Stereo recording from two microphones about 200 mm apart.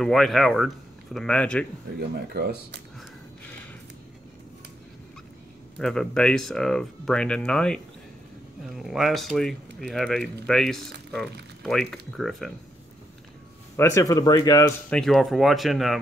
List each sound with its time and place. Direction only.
0.0 s speech: centre (ahead or behind)
2.0 s speech: 55° right (ahead or behind)
5.8 s speech: 5° left (ahead or behind)
13.7 s speech: 15° left (ahead or behind)
14.9 s speech: centre (ahead or behind)